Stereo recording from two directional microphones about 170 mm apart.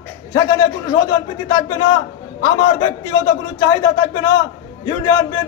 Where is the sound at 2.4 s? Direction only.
20° left (ahead or behind).